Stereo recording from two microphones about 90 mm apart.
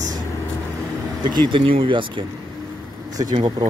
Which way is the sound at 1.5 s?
70° right (ahead or behind).